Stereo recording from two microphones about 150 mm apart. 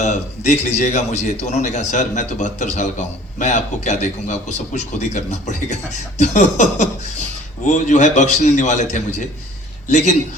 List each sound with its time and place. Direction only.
0.0 s a man's voice: 55° left (ahead or behind)